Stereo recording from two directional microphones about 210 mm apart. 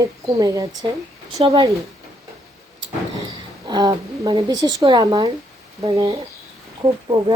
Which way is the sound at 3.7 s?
20° right (ahead or behind).